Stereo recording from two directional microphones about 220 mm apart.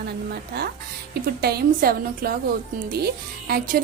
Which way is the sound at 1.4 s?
45° right (ahead or behind).